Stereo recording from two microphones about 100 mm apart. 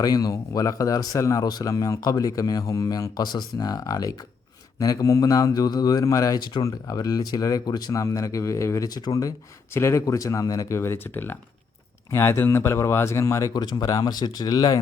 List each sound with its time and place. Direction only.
0.0 s speech: 40° left (ahead or behind)
9.7 s speech: 30° left (ahead or behind)